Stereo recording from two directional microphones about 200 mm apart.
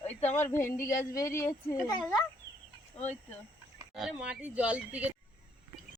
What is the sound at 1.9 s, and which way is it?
Speech, 5° left (ahead or behind).